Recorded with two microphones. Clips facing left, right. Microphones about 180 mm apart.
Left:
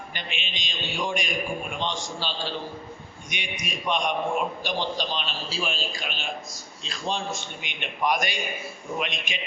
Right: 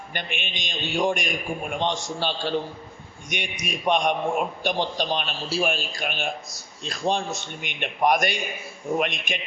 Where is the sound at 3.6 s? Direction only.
50° right (ahead or behind).